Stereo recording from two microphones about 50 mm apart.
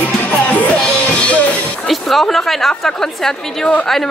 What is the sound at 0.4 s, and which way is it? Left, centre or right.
Music, left.